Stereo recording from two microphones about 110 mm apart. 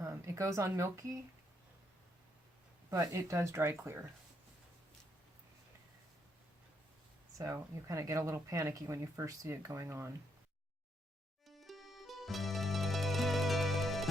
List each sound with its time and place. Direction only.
0.0 s speech: 30° right (ahead or behind)
2.9 s speech: 30° right (ahead or behind)
7.3 s speech: 30° right (ahead or behind)
11.4 s music: centre (ahead or behind)